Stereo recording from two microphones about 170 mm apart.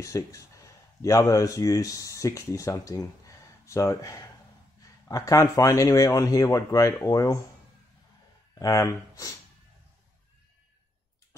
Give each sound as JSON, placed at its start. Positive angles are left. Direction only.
{"t": 0.0, "sound": "speech", "side_deg": 20}
{"t": 8.5, "sound": "speech", "side_deg": 20}